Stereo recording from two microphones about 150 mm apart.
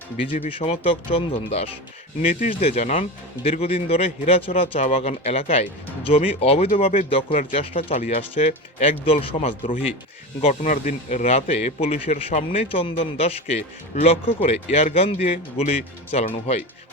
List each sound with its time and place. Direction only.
0.5 s speech: 40° left (ahead or behind)
2.3 s speech: 55° left (ahead or behind)
10.4 s speech: 55° left (ahead or behind)
12.1 s speech: 55° left (ahead or behind)